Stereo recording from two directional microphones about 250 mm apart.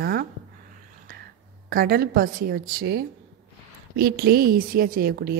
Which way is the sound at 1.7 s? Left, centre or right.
Right.